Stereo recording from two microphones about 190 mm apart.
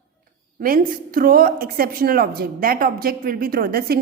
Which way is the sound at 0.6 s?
50° right (ahead or behind).